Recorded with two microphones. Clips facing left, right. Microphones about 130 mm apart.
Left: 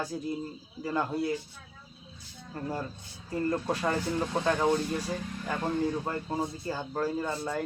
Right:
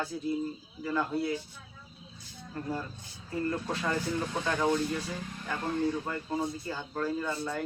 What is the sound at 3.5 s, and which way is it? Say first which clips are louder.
Speech: left 4 dB; 25° left (ahead or behind).